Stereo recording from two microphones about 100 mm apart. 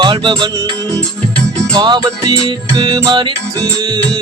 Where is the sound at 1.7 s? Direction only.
40° right (ahead or behind).